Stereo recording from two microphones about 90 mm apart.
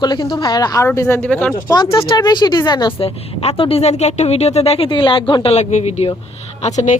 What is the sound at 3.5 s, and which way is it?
Speech, 90° left.